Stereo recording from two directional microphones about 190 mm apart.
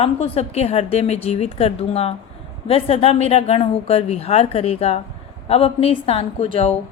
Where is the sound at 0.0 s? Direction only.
30° left (ahead or behind).